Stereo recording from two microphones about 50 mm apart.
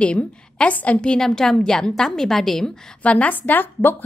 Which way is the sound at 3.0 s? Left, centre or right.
Left.